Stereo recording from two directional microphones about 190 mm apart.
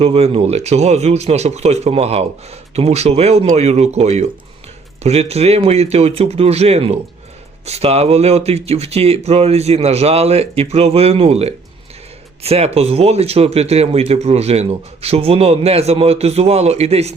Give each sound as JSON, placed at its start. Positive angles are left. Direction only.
{"t": 0.0, "sound": "speech", "side_deg": -30}